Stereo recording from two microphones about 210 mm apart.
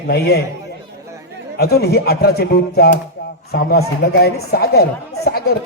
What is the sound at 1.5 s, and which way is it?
Speech, 50° left (ahead or behind).